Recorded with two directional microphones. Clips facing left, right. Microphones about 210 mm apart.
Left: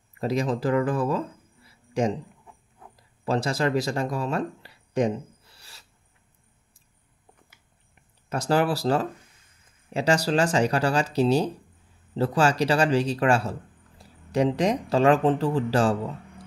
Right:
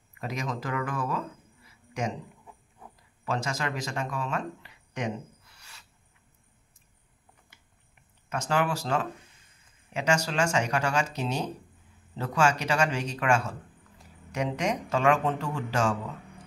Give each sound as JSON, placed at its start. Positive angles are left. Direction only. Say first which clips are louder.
{"t": 0.2, "sound": "speech", "louder": "left 9 dB", "side_deg": 35}
{"t": 3.3, "sound": "speech", "louder": "left 7 dB", "side_deg": 35}
{"t": 8.3, "sound": "speech", "louder": "left 5 dB", "side_deg": 35}